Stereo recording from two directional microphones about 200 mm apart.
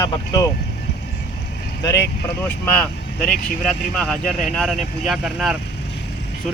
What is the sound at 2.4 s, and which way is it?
Speech, 10° left (ahead or behind).